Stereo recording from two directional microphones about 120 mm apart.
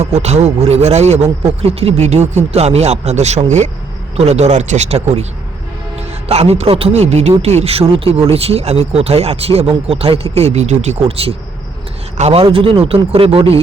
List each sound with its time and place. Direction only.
0.0 s speech: 65° right (ahead or behind)
6.2 s speech: 60° right (ahead or behind)